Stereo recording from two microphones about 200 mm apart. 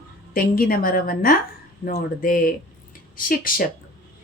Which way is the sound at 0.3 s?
45° left (ahead or behind).